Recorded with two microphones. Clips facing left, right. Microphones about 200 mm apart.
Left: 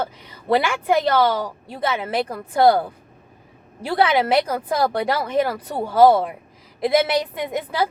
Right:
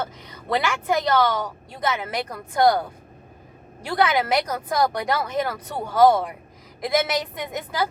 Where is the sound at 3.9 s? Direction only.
30° left (ahead or behind).